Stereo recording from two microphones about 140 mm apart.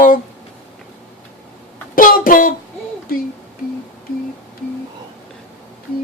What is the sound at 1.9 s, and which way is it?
Speech, 80° left.